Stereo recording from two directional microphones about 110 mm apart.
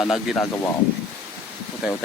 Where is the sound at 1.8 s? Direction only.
10° right (ahead or behind).